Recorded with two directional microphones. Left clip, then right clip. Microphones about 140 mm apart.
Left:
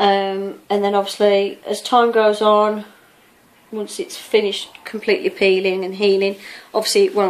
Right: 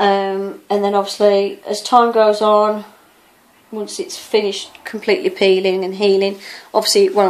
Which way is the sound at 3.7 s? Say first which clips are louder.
Right 1 dB; centre (ahead or behind).